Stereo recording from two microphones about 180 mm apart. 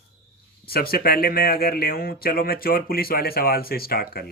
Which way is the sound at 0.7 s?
55° left (ahead or behind).